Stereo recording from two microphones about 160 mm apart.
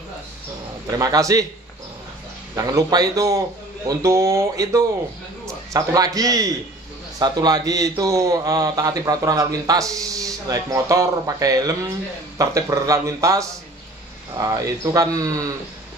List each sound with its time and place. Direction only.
0.9 s a man's voice: 25° right (ahead or behind)
2.5 s a man's voice: 20° right (ahead or behind)